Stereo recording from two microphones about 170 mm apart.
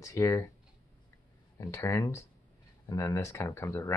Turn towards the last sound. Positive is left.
turn(degrees=15)  # may be behind; listen again after turning